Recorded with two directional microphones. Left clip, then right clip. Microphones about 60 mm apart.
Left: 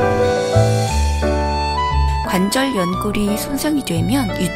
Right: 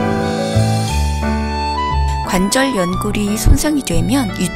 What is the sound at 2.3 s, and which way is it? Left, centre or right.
Speech, right.